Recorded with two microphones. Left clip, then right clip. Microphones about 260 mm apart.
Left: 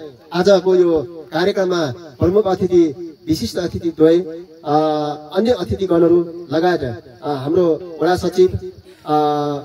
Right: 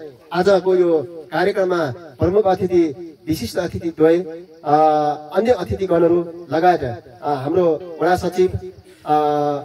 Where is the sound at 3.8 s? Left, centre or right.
Left.